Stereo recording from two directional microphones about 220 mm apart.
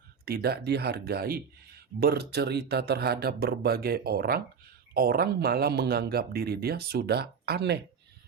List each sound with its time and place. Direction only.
0.3 s speech: 45° right (ahead or behind)